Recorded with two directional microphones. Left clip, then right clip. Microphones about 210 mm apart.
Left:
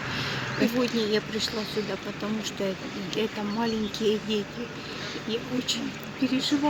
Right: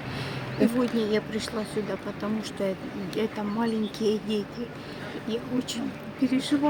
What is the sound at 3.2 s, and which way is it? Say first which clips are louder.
Speech: even; 10° right (ahead or behind).